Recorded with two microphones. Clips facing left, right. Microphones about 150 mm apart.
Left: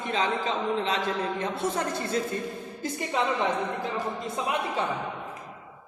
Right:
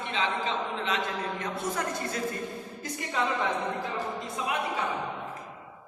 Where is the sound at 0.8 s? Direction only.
30° left (ahead or behind).